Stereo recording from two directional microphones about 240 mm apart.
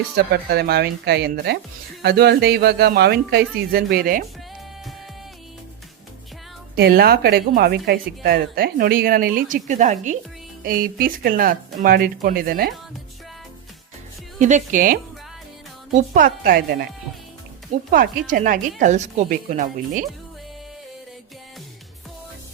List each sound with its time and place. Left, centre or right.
0.3 s speech: right
6.7 s speech: right
14.3 s speech: right
16.0 s speech: right
17.9 s speech: right